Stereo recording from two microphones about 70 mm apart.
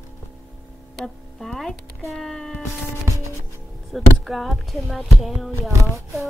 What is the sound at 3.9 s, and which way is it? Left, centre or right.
Speech, centre.